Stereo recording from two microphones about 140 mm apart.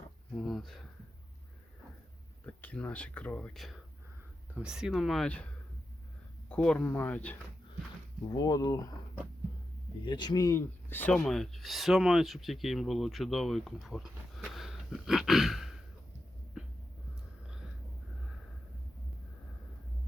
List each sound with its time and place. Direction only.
0.3 s speech: centre (ahead or behind)
2.5 s speech: 10° left (ahead or behind)
6.5 s speech: 10° left (ahead or behind)
8.3 s speech: 25° left (ahead or behind)
10.0 s speech: 35° left (ahead or behind)
10.8 s speech: 15° left (ahead or behind)
11.1 s speech: 5° left (ahead or behind)